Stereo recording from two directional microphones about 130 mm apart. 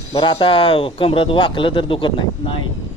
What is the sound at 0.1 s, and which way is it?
Speech, 40° left (ahead or behind).